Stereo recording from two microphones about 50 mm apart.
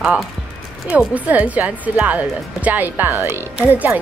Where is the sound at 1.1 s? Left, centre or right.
Right.